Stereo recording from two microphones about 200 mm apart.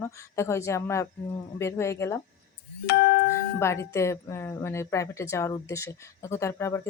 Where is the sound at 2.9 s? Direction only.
50° left (ahead or behind).